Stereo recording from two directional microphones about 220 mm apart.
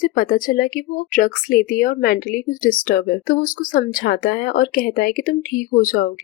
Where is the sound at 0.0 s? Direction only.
40° left (ahead or behind).